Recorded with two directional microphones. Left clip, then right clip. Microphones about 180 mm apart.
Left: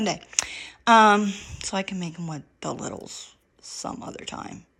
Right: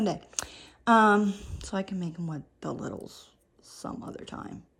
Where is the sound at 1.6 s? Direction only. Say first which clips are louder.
Left 7 dB; 10° right (ahead or behind).